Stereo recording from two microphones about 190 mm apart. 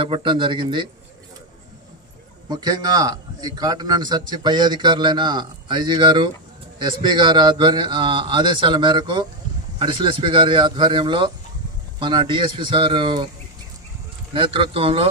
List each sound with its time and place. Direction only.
0.0 s a man's voice: 25° right (ahead or behind)
2.5 s a man's voice: 20° right (ahead or behind)
14.3 s a man's voice: 30° right (ahead or behind)